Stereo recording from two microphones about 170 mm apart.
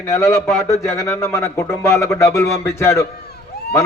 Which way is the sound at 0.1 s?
15° left (ahead or behind).